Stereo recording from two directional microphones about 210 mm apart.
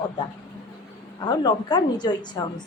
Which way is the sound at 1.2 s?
20° left (ahead or behind).